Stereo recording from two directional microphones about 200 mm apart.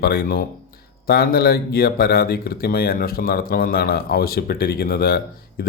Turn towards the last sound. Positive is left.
turn(degrees=50)  # may be behind; listen again after turning